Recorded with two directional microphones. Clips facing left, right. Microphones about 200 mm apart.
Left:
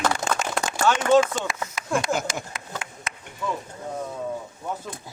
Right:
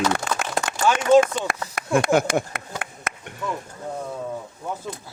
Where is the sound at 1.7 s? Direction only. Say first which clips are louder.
Right 7 dB; 55° right (ahead or behind).